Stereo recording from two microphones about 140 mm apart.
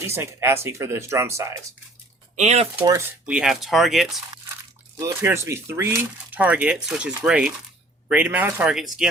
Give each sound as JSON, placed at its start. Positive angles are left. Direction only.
{"t": 0.0, "sound": "speech", "side_deg": -20}
{"t": 2.3, "sound": "speech", "side_deg": -55}
{"t": 3.1, "sound": "speech", "side_deg": -10}
{"t": 4.9, "sound": "speech", "side_deg": -20}
{"t": 8.7, "sound": "speech", "side_deg": -5}